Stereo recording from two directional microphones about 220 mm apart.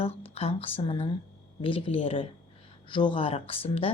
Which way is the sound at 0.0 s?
25° left (ahead or behind).